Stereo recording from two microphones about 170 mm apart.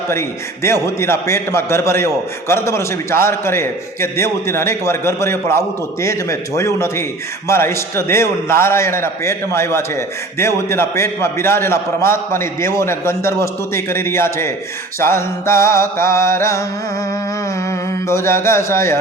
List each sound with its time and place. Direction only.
0.1 s a man's voice: 15° left (ahead or behind)
17.7 s a man's voice: 15° left (ahead or behind)